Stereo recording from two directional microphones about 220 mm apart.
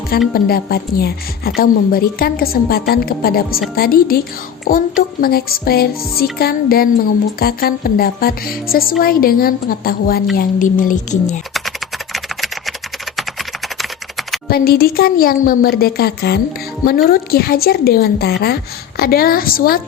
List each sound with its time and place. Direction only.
0.3 s speech: 45° left (ahead or behind)
12.1 s a sound: centre (ahead or behind)
13.1 s typing: centre (ahead or behind)
14.4 s speech: 45° left (ahead or behind)